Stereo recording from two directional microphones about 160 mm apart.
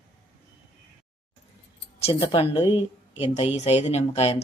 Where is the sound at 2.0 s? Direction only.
35° left (ahead or behind).